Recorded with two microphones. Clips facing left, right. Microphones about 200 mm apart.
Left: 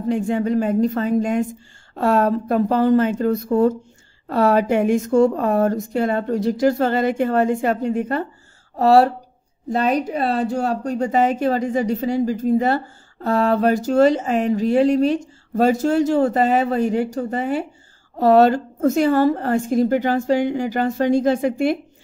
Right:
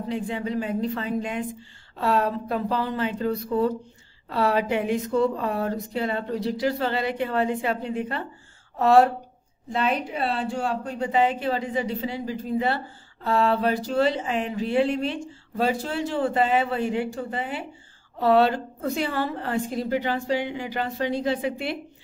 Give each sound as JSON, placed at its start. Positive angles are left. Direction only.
{"t": 0.1, "sound": "speech", "side_deg": 45}